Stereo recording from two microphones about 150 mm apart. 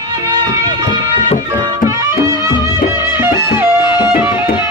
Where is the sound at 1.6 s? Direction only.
20° right (ahead or behind).